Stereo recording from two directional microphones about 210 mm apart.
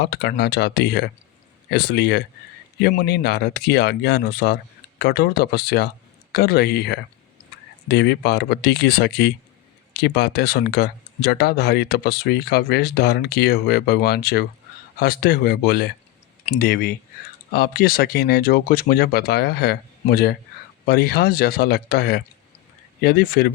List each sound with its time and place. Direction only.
0.0 s speech: 50° left (ahead or behind)